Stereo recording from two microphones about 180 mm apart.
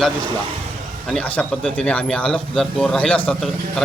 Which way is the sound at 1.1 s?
5° left (ahead or behind).